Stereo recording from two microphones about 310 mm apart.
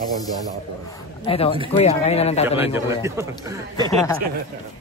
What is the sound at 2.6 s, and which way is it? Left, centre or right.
Speech, centre.